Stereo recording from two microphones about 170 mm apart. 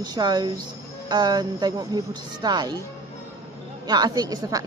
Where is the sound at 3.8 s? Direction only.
25° right (ahead or behind).